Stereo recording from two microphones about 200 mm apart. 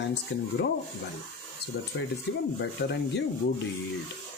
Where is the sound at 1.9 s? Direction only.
65° left (ahead or behind).